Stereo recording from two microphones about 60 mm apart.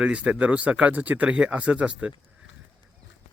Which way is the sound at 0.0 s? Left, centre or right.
Centre.